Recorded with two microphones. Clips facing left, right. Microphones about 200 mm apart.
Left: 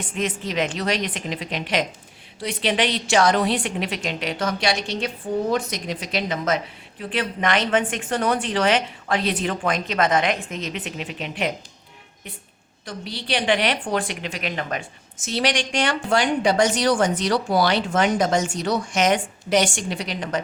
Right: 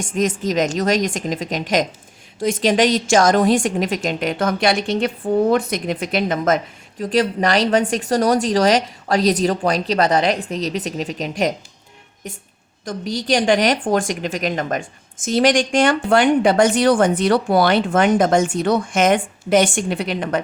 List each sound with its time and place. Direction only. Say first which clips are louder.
0.0 s a woman's voice: right 6 dB; 45° right (ahead or behind)
7.0 s speech: right 7 dB; 40° right (ahead or behind)
12.8 s a woman's voice: right 8 dB; 45° right (ahead or behind)